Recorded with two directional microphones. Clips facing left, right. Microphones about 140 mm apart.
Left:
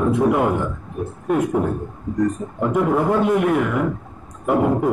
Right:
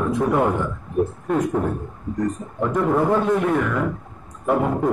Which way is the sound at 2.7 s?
15° left (ahead or behind).